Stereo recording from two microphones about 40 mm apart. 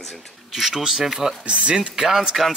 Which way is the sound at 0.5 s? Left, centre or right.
Centre.